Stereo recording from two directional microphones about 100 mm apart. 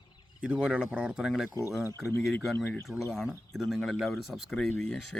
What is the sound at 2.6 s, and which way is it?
Speech, 20° left (ahead or behind).